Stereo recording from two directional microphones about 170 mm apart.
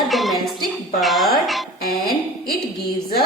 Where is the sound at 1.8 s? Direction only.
60° left (ahead or behind).